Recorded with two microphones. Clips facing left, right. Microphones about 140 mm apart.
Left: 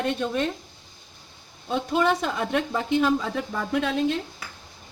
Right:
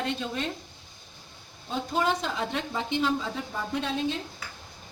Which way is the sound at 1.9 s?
60° left (ahead or behind).